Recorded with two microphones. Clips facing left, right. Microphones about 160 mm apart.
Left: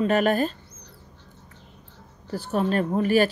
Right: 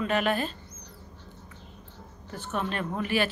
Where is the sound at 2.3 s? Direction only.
35° left (ahead or behind).